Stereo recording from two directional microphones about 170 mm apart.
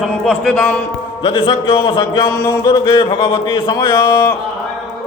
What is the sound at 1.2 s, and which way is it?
Speech, 30° left (ahead or behind).